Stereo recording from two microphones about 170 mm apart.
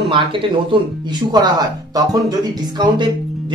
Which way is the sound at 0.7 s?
25° right (ahead or behind).